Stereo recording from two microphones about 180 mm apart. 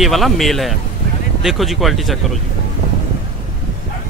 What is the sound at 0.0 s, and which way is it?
Speech, centre (ahead or behind).